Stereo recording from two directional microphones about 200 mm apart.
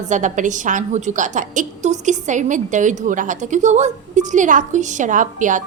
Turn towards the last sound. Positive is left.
turn(degrees=-40)  # may be behind; listen again after turning